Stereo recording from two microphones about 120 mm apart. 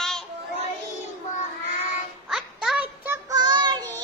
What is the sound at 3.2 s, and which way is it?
Child singing, 35° right (ahead or behind).